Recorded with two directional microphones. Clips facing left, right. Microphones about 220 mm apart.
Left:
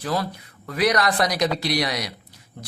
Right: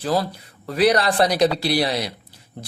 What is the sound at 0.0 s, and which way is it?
A man's voice, 30° right (ahead or behind).